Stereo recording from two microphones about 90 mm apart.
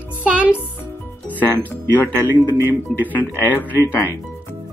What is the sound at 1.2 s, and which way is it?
Speech, 20° left (ahead or behind).